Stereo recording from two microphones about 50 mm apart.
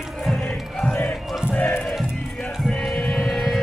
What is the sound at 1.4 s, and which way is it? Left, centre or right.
Crowd, left.